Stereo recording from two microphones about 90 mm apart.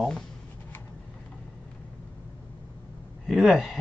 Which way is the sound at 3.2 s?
Centre (ahead or behind).